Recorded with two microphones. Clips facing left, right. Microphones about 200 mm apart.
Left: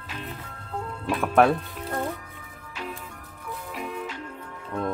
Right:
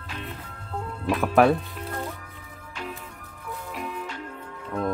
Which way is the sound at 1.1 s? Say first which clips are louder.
Right 1 dB; centre (ahead or behind).